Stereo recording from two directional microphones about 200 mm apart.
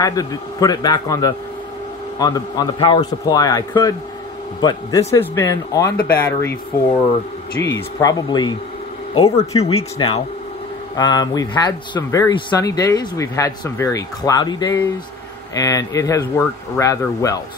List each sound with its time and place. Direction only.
0.0 s a man's voice: 20° left (ahead or behind)
5.9 s speech: 50° left (ahead or behind)
6.2 s speech: 10° left (ahead or behind)
8.0 s a man's voice: 20° left (ahead or behind)